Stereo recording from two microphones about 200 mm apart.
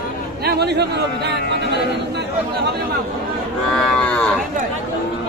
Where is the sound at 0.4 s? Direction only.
55° right (ahead or behind).